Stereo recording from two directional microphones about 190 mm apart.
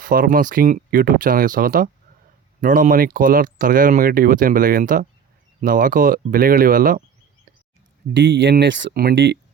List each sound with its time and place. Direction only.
0.0 s speech: 50° right (ahead or behind)
8.1 s speech: 70° right (ahead or behind)